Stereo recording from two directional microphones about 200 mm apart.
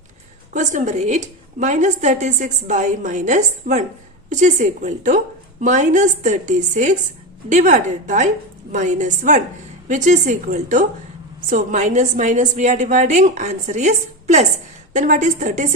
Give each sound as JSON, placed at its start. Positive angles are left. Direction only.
{"t": 0.5, "sound": "a woman's voice", "side_deg": -40}